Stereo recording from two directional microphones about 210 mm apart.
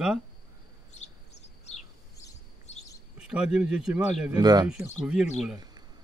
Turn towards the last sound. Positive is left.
turn(degrees=-5)  # may be behind; listen again after turning